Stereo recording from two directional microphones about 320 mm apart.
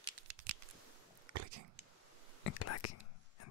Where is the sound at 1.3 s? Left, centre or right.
Right.